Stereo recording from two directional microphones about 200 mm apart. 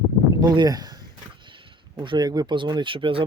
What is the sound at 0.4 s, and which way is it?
Speech, 20° right (ahead or behind).